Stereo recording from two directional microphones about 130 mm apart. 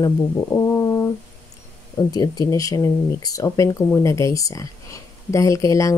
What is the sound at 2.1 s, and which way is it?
Speech, 30° left (ahead or behind).